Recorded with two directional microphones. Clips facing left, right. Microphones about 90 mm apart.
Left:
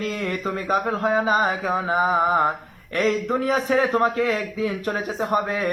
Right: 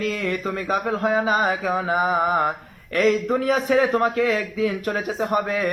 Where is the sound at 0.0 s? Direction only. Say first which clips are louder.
Right 1 dB; 35° left (ahead or behind).